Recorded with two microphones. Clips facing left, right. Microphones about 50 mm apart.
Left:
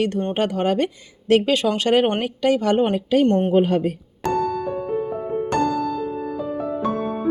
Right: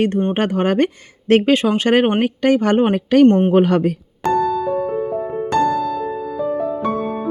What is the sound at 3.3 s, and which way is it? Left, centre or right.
Speech, right.